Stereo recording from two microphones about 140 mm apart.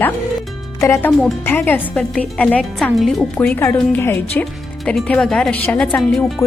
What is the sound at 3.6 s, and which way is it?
Speech, 15° left (ahead or behind).